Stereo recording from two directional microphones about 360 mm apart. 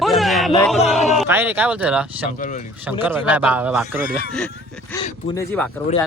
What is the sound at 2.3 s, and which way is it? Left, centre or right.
Speech, left.